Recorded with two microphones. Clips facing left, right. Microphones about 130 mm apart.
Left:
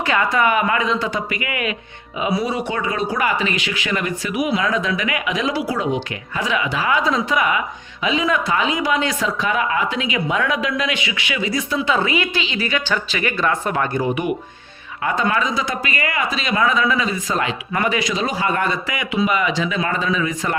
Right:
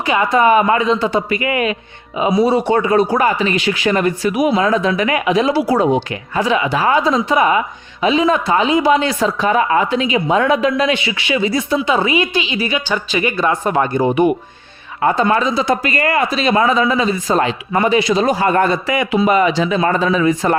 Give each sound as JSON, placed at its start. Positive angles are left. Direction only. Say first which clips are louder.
{"t": 0.0, "sound": "speech", "louder": "right 4 dB", "side_deg": -20}
{"t": 7.0, "sound": "speech", "louder": "right 5 dB", "side_deg": -25}
{"t": 11.8, "sound": "a woman's voice", "louder": "right 1 dB", "side_deg": -15}
{"t": 14.0, "sound": "speech", "louder": "right 7 dB", "side_deg": -35}
{"t": 18.1, "sound": "speech", "louder": "right 7 dB", "side_deg": -40}